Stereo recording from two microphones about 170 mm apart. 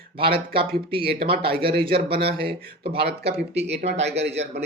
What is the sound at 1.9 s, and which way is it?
Speech, 65° right (ahead or behind).